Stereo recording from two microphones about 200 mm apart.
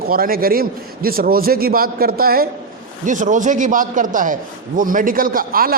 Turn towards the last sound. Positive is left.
turn(degrees=-45)  # may be behind; listen again after turning